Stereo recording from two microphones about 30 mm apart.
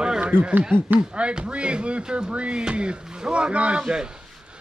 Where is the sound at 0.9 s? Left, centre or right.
Right.